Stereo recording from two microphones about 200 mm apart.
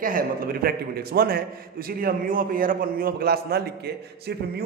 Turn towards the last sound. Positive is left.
turn(degrees=-55)  # may be behind; listen again after turning